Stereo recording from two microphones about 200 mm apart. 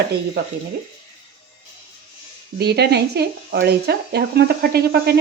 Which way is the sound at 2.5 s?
55° right (ahead or behind).